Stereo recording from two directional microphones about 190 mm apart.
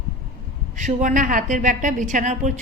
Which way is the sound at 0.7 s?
40° right (ahead or behind).